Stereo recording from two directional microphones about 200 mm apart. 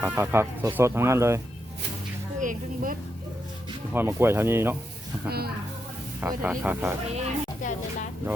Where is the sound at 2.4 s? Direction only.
40° right (ahead or behind).